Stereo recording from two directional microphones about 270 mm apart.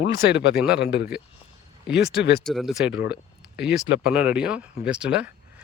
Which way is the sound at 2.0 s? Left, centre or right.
Left.